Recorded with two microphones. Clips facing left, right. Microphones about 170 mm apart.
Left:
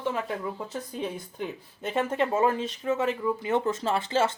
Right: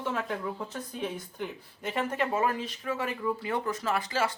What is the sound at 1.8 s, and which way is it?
Speech, 25° left (ahead or behind).